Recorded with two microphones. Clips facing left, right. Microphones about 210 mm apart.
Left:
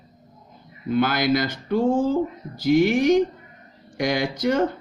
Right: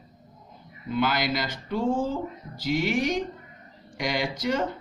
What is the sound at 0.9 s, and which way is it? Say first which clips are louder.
Speech: left 6 dB; 55° left (ahead or behind).